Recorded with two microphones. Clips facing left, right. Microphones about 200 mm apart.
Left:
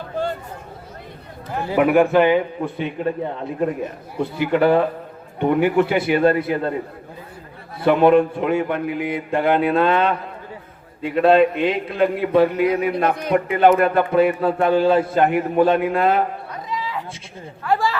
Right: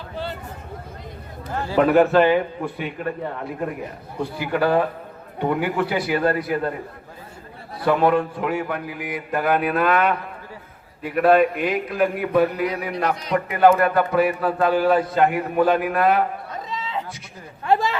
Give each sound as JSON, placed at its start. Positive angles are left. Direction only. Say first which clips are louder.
{"t": 1.5, "sound": "a man's voice", "louder": "left 1 dB", "side_deg": 15}
{"t": 7.8, "sound": "speech", "louder": "left 5 dB", "side_deg": 25}
{"t": 13.1, "sound": "a man's voice", "louder": "left 3 dB", "side_deg": 55}
{"t": 13.3, "sound": "speech", "louder": "left 1 dB", "side_deg": 25}
{"t": 16.5, "sound": "a sound", "louder": "left 2 dB", "side_deg": -25}
{"t": 17.6, "sound": "speech", "louder": "even", "side_deg": -20}